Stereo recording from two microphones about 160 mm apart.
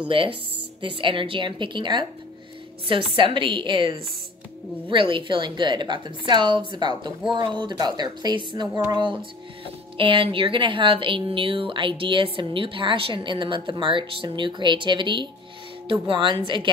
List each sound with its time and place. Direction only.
0.1 s a woman's voice: 35° right (ahead or behind)